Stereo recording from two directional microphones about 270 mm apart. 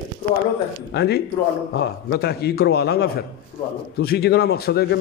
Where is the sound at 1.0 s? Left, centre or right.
Left.